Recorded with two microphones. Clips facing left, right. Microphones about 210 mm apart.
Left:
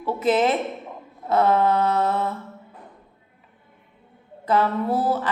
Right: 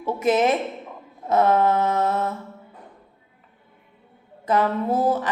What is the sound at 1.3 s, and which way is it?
Speech, 15° right (ahead or behind).